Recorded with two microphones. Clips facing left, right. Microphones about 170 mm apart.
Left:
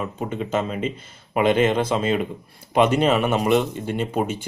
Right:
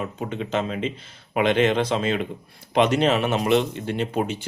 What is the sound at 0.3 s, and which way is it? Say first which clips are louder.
Speech: left 1 dB; 45° left (ahead or behind).